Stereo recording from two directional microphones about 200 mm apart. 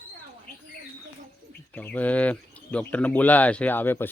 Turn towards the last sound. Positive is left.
turn(degrees=10)  # may be behind; listen again after turning